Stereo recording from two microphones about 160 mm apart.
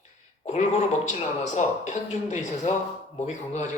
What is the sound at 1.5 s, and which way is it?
A man's voice, 45° left (ahead or behind).